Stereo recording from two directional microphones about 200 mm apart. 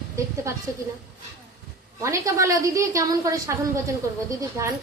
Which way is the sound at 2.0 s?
15° right (ahead or behind).